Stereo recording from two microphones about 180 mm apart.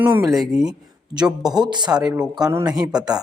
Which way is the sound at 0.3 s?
Centre (ahead or behind).